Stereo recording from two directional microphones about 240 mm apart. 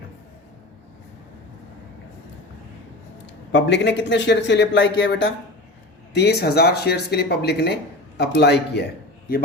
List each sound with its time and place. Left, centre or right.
3.5 s speech: left